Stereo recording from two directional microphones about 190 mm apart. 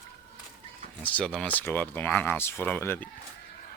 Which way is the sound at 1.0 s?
5° left (ahead or behind).